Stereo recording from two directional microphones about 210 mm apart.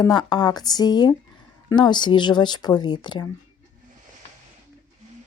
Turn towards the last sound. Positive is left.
turn(degrees=20)  # may be behind; listen again after turning